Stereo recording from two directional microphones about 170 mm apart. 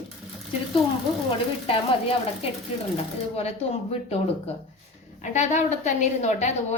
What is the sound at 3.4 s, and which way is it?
A woman's voice, 35° left (ahead or behind).